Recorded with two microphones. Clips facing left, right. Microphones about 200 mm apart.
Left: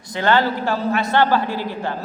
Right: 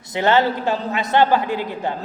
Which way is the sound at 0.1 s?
20° right (ahead or behind).